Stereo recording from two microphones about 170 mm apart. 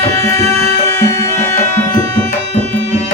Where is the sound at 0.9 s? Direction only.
15° left (ahead or behind).